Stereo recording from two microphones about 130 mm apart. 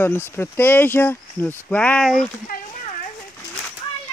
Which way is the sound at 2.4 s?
90° left.